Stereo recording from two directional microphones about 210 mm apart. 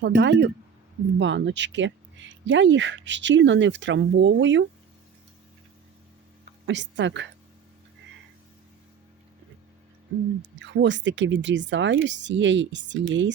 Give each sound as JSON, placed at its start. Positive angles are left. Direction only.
{"t": 0.0, "sound": "speech", "side_deg": -55}
{"t": 6.7, "sound": "speech", "side_deg": -60}
{"t": 10.6, "sound": "speech", "side_deg": -60}